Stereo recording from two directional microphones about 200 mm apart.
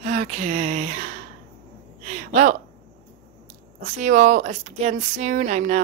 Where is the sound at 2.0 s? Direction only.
35° right (ahead or behind).